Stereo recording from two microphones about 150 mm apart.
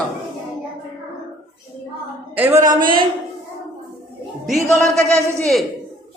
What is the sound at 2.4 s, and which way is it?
Speech, 15° right (ahead or behind).